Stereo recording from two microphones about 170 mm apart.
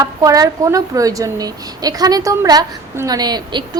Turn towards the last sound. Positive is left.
turn(degrees=-25)  # may be behind; listen again after turning